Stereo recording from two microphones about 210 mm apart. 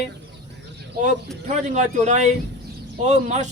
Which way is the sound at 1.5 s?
35° right (ahead or behind).